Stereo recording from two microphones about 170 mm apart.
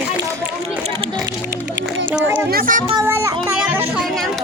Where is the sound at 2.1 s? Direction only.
10° right (ahead or behind).